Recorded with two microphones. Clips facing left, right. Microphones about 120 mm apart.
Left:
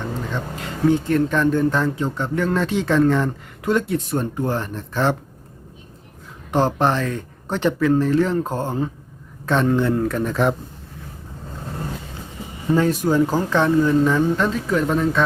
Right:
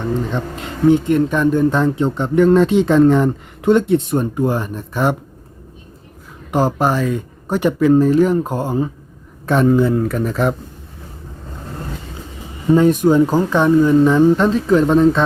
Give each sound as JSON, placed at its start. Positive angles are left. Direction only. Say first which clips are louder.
{"t": 0.3, "sound": "speech", "louder": "right 4 dB", "side_deg": -20}
{"t": 6.5, "sound": "speech", "louder": "right 2 dB", "side_deg": -5}
{"t": 12.7, "sound": "speech", "louder": "right 6 dB", "side_deg": -15}